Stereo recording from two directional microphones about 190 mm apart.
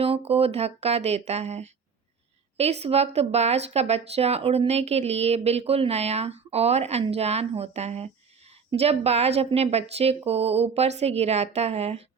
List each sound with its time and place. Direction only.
0.0 s speech: 30° right (ahead or behind)